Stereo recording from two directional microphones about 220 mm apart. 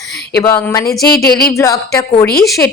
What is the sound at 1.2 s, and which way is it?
Speech, 45° left (ahead or behind).